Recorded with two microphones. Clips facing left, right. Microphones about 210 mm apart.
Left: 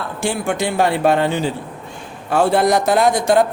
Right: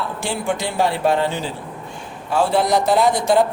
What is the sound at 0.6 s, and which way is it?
A man's voice, 60° left (ahead or behind).